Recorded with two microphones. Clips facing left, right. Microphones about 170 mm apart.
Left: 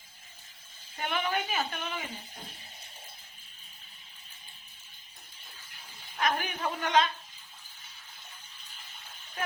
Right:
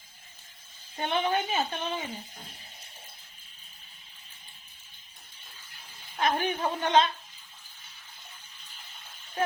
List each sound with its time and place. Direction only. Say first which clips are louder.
0.9 s speech: right 4 dB; 30° right (ahead or behind)
6.1 s speech: right 3 dB; 30° right (ahead or behind)